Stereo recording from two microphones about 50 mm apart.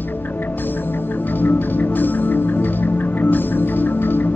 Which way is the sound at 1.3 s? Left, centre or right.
Left.